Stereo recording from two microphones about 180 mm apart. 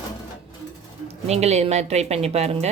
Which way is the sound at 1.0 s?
35° right (ahead or behind).